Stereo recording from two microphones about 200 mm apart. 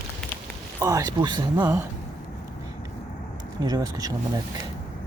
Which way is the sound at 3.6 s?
20° right (ahead or behind).